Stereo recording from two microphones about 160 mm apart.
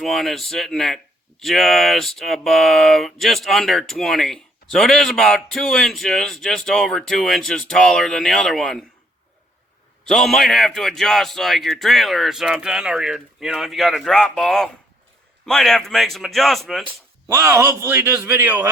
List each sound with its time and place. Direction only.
0.0 s speech: centre (ahead or behind)
10.1 s speech: centre (ahead or behind)
17.3 s a man's voice: 15° right (ahead or behind)